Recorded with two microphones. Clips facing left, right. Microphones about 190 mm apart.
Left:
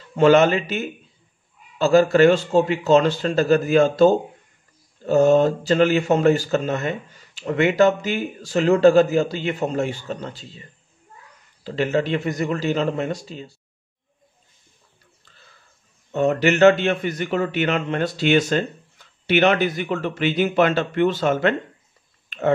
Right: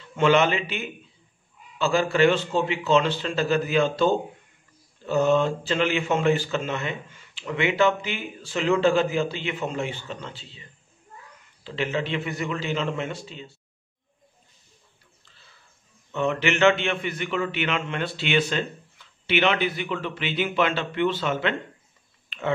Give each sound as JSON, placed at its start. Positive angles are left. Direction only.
{"t": 0.1, "sound": "speech", "side_deg": 40}
{"t": 11.6, "sound": "speech", "side_deg": 40}
{"t": 16.1, "sound": "a man's voice", "side_deg": 40}